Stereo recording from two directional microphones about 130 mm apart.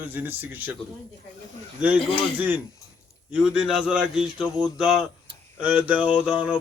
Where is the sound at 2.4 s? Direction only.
10° right (ahead or behind).